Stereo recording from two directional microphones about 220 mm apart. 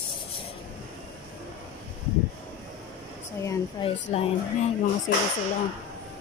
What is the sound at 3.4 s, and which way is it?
Speech, 15° left (ahead or behind).